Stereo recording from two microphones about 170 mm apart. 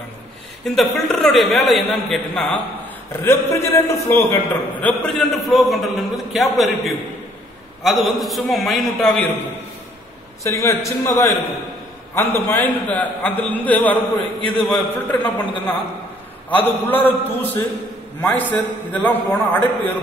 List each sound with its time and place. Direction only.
0.7 s a man's voice: centre (ahead or behind)
3.3 s a man's voice: 15° left (ahead or behind)
7.8 s a man's voice: centre (ahead or behind)
10.4 s a man's voice: 15° left (ahead or behind)
16.4 s a man's voice: 10° left (ahead or behind)